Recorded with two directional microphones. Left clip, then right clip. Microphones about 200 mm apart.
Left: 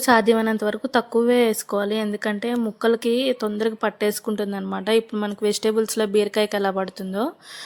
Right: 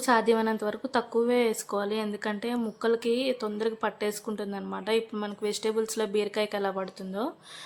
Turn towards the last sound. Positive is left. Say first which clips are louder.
# left 7 dB
turn(degrees=30)  # may be behind; listen again after turning